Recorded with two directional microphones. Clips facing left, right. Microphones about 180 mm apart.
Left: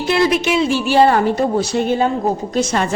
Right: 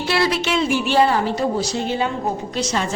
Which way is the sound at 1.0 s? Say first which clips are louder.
Left 5 dB; 55° left (ahead or behind).